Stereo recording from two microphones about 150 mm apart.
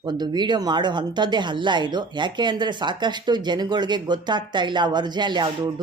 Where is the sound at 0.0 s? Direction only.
30° right (ahead or behind).